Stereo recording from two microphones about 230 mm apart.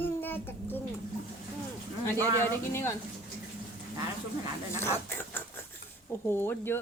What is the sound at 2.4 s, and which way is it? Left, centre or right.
Speech, centre.